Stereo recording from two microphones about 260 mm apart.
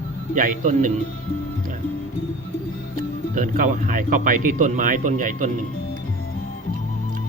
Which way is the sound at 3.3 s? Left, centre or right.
Right.